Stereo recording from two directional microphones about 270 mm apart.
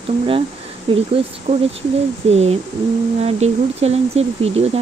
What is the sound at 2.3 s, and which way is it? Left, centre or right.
Speech, right.